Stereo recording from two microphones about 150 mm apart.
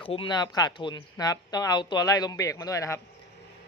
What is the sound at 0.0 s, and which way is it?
Speech, 35° left (ahead or behind).